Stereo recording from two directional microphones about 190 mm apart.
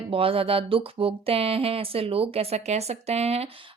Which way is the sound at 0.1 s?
30° right (ahead or behind).